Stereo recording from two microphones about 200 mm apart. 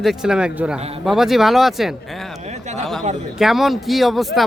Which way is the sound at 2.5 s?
35° right (ahead or behind).